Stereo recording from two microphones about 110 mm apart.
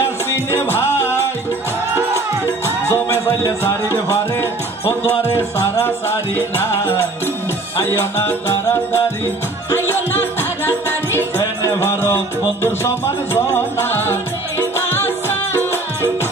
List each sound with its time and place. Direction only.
0.0 s music: 20° left (ahead or behind)
2.0 s music: 25° right (ahead or behind)
2.6 s music: 20° left (ahead or behind)